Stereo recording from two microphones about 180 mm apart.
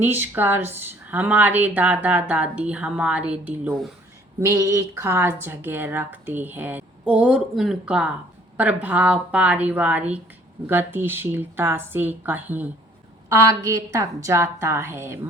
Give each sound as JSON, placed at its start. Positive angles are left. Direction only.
{"t": 0.0, "sound": "speech", "side_deg": -10}
{"t": 4.4, "sound": "speech", "side_deg": -15}